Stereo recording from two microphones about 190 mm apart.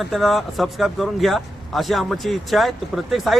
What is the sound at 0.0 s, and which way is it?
Speech, centre (ahead or behind).